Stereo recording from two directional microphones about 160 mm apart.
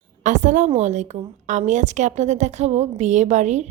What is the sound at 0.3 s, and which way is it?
Speech, 50° right (ahead or behind).